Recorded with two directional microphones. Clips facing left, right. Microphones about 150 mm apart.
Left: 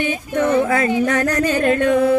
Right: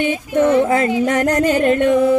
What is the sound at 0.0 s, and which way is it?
Music, 20° right (ahead or behind).